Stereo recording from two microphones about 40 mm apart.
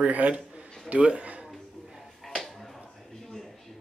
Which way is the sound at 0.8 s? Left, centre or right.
Right.